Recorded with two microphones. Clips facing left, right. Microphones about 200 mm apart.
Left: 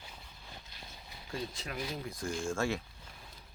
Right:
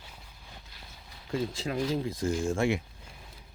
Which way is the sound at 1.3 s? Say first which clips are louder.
Right 9 dB; 25° right (ahead or behind).